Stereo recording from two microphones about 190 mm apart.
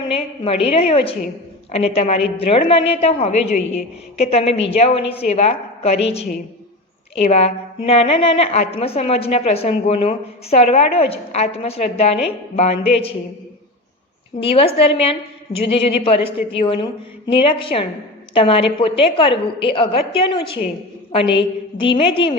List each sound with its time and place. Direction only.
0.1 s a woman's voice: 30° left (ahead or behind)
7.3 s a woman's voice: 35° left (ahead or behind)
14.3 s a woman's voice: 30° left (ahead or behind)
15.8 s a woman's voice: 30° left (ahead or behind)